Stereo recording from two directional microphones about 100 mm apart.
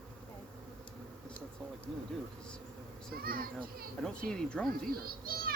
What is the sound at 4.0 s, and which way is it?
Speech, 10° left (ahead or behind).